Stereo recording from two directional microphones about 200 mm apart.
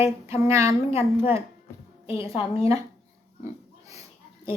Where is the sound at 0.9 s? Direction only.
30° left (ahead or behind).